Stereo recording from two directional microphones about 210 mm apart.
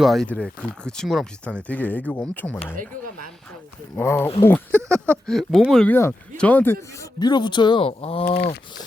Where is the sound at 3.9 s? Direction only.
10° left (ahead or behind); by 8.2 s 25° left (ahead or behind).